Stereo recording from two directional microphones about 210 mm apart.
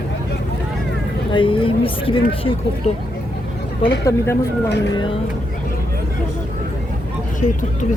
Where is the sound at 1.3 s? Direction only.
25° left (ahead or behind).